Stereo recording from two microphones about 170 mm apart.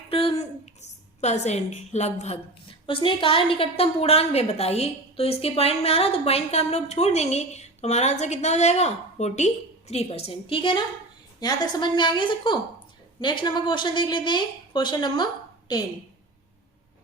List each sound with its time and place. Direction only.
0.1 s a woman's voice: 35° left (ahead or behind)